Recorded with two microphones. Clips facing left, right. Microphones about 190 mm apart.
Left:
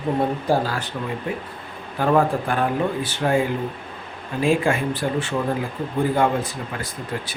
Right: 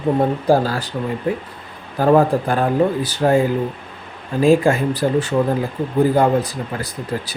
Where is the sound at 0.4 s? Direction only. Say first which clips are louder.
Right 5 dB; 35° right (ahead or behind).